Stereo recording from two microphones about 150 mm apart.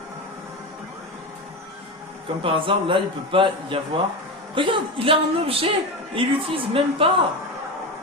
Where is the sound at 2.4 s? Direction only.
35° right (ahead or behind).